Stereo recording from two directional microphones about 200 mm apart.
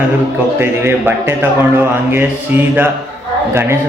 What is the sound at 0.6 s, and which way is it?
A man's voice, 10° right (ahead or behind).